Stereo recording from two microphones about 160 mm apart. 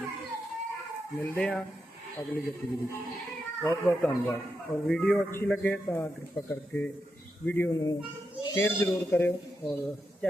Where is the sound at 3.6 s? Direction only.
10° left (ahead or behind).